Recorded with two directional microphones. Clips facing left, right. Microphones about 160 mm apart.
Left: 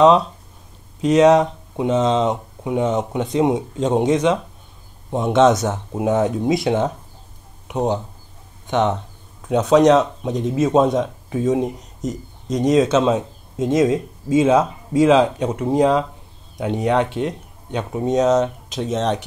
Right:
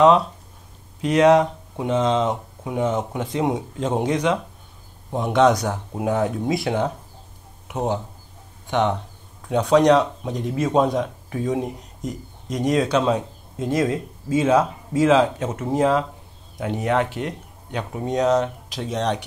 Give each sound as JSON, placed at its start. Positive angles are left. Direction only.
{"t": 1.0, "sound": "speech", "side_deg": 20}